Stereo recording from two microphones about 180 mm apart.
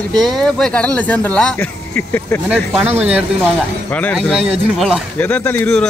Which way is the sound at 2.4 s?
10° right (ahead or behind).